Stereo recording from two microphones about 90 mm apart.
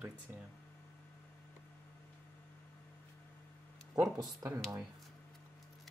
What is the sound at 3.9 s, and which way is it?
Speech, 40° right (ahead or behind).